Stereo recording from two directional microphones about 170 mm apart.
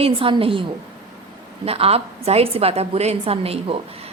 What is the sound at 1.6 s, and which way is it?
A woman's voice, 35° right (ahead or behind).